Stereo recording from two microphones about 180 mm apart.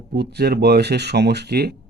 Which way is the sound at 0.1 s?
65° right (ahead or behind).